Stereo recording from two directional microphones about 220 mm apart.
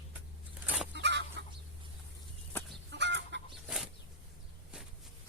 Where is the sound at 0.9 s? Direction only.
55° right (ahead or behind).